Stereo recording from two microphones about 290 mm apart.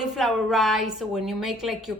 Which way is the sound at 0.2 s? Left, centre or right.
Centre.